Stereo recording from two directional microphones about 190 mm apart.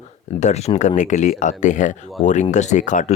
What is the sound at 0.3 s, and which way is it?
A man's voice, 35° left (ahead or behind).